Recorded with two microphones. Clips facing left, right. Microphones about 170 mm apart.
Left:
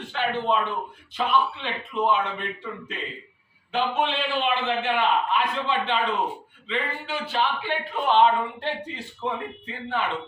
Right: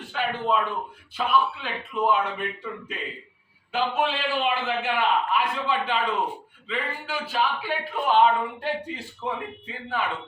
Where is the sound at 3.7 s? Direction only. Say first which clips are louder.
Even; 5° right (ahead or behind).